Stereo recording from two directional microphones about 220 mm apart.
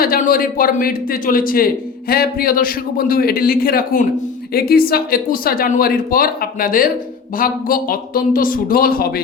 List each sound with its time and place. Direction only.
0.0 s speech: 40° left (ahead or behind)